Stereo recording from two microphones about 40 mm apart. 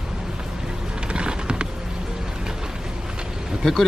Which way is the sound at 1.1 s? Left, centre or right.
Right.